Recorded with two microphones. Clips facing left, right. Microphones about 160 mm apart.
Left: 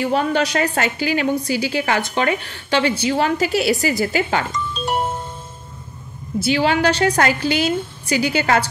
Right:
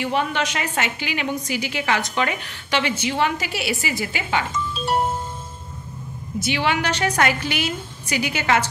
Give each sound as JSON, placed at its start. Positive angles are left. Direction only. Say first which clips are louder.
{"t": 0.0, "sound": "a woman's voice", "louder": "left 4 dB", "side_deg": 40}
{"t": 6.4, "sound": "a woman's voice", "louder": "left 6 dB", "side_deg": 35}